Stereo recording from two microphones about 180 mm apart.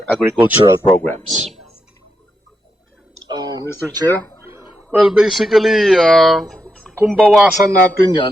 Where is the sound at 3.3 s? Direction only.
20° right (ahead or behind).